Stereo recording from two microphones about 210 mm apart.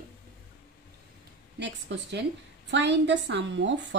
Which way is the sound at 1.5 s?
55° right (ahead or behind).